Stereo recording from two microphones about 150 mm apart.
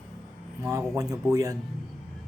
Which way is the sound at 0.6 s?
20° right (ahead or behind).